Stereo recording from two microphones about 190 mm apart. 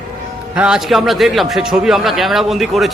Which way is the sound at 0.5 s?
5° right (ahead or behind).